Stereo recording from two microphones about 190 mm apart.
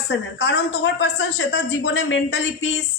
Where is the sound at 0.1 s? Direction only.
65° left (ahead or behind).